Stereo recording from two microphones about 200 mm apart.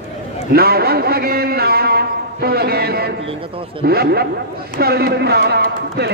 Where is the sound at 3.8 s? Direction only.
50° right (ahead or behind).